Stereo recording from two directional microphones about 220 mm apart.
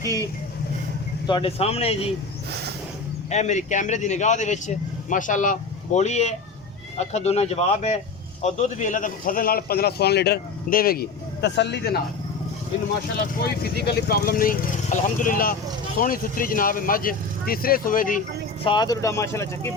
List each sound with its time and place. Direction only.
1.3 s speech: 25° left (ahead or behind)
2.5 s vehicle: 50° right (ahead or behind)
3.2 s a man's voice: 30° left (ahead or behind); by 11.9 s 50° left (ahead or behind)
13.4 s a man's voice: 45° left (ahead or behind)
18.6 s speech: 20° left (ahead or behind)